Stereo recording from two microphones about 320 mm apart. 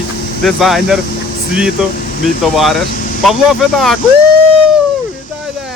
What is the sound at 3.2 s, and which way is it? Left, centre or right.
Speech, centre.